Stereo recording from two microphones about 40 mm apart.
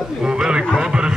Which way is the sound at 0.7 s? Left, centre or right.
Right.